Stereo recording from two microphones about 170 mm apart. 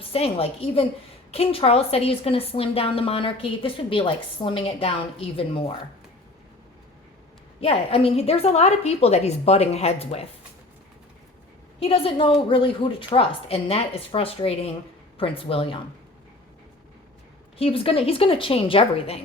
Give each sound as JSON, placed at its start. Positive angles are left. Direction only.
{"t": 0.1, "sound": "a woman's voice", "side_deg": 35}
{"t": 7.6, "sound": "a woman's voice", "side_deg": 35}
{"t": 11.8, "sound": "a woman's voice", "side_deg": 35}
{"t": 17.6, "sound": "a woman's voice", "side_deg": 35}